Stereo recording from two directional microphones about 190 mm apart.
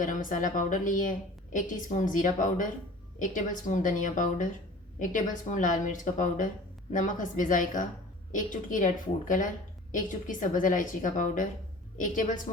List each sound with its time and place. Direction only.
0.0 s speech: 45° left (ahead or behind)